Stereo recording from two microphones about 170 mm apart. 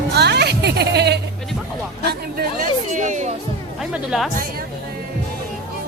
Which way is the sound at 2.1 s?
60° right (ahead or behind).